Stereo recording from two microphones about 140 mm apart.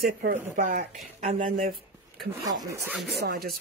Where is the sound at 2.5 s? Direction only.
25° right (ahead or behind).